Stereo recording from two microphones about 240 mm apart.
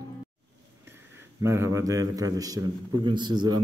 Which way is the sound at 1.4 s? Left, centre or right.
Centre.